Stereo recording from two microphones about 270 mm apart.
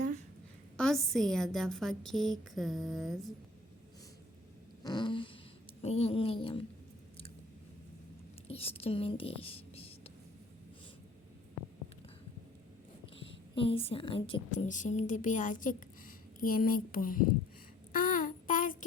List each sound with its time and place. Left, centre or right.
0.8 s a woman's voice: centre
4.8 s fart: centre
5.8 s speech: left
8.4 s speech: left
13.1 s a woman's voice: centre
17.9 s child singing: left